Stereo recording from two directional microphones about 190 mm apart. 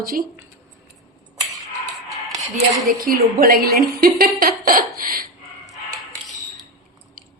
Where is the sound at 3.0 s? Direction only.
50° right (ahead or behind).